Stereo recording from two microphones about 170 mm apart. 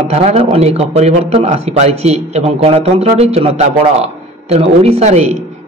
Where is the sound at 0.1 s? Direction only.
40° right (ahead or behind).